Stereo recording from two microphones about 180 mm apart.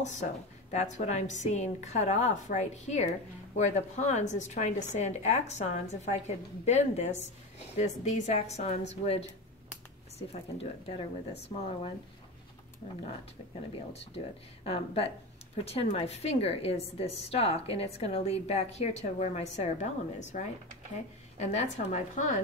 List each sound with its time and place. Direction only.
0.0 s a woman's voice: 40° left (ahead or behind)
14.6 s a woman's voice: 35° left (ahead or behind)